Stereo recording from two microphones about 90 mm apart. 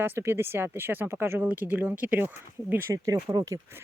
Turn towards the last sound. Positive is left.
turn(degrees=-40)  # may be behind; listen again after turning